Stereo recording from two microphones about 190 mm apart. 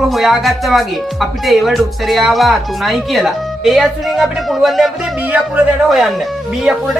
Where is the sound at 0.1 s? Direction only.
Centre (ahead or behind).